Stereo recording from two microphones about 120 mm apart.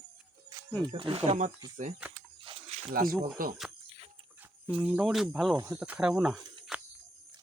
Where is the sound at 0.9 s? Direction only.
45° right (ahead or behind).